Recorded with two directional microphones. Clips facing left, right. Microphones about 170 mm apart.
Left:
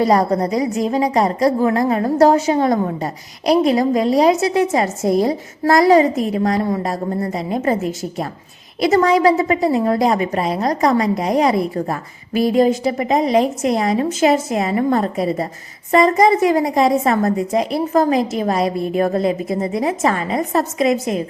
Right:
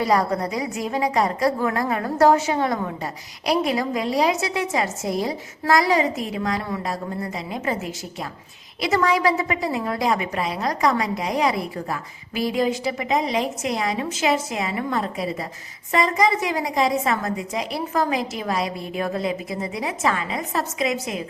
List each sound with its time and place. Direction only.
0.0 s a woman's voice: 40° left (ahead or behind)